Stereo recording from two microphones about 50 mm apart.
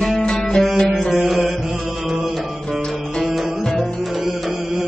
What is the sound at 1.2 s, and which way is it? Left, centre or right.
Music, centre.